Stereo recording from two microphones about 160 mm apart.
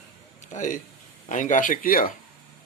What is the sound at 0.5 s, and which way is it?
Speech, 55° left (ahead or behind).